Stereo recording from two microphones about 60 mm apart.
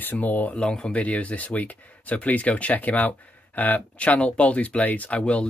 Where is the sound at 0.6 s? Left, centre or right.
Centre.